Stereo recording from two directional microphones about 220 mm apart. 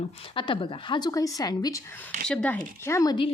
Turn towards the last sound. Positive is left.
turn(degrees=20)  # may be behind; listen again after turning